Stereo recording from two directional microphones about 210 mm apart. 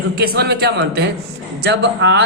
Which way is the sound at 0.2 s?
50° right (ahead or behind).